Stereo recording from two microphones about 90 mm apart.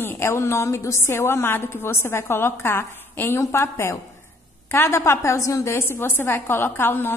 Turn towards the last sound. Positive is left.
turn(degrees=25)  # may be behind; listen again after turning